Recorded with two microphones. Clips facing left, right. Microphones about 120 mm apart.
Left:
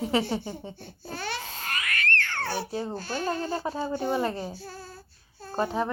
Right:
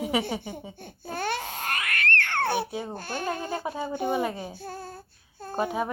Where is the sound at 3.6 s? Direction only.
15° right (ahead or behind).